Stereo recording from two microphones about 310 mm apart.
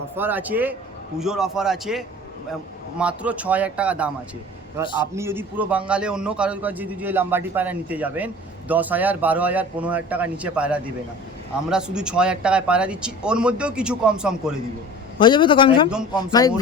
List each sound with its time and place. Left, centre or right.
0.2 s a man's voice: centre
15.2 s a man's voice: centre
15.9 s a man's voice: centre